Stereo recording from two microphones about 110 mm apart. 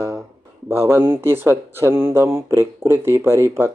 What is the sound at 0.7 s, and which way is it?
Mantra, 20° right (ahead or behind).